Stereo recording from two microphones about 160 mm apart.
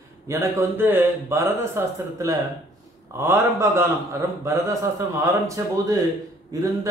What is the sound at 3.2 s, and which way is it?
A man's voice, 15° right (ahead or behind).